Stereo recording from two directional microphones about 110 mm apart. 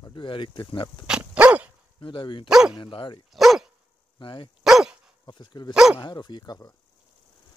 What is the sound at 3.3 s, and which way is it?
Dog, centre (ahead or behind).